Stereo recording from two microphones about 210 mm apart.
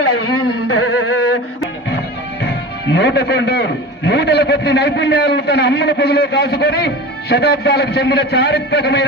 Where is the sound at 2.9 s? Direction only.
55° left (ahead or behind).